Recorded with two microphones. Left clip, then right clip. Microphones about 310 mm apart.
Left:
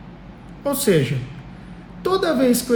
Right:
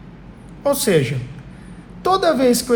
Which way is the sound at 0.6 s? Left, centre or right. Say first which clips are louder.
Right 2 dB; centre.